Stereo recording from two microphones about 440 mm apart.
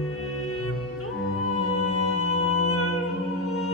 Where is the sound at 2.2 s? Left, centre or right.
Left.